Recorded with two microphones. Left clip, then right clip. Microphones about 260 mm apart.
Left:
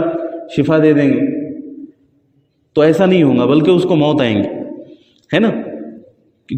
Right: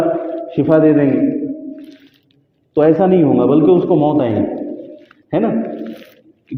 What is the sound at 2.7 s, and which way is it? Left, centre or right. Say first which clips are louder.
A man's voice: even; left.